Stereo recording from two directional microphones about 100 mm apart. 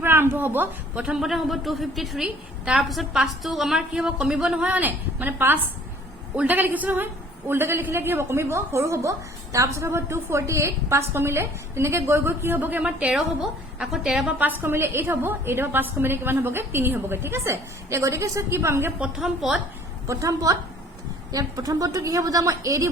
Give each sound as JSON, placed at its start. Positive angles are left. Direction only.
{"t": 0.0, "sound": "a man's voice", "side_deg": -25}
{"t": 14.3, "sound": "a woman's voice", "side_deg": -20}
{"t": 20.1, "sound": "a woman's voice", "side_deg": -30}